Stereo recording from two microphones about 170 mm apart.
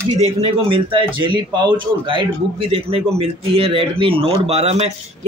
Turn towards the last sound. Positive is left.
turn(degrees=-35)  # may be behind; listen again after turning